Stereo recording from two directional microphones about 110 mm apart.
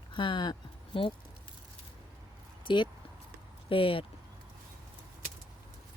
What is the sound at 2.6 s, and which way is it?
Speech, 50° left (ahead or behind).